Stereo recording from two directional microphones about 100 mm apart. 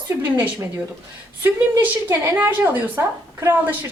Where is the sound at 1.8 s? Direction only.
20° right (ahead or behind).